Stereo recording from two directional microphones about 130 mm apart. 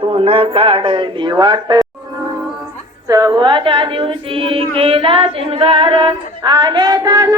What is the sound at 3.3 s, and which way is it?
Child singing, 35° right (ahead or behind).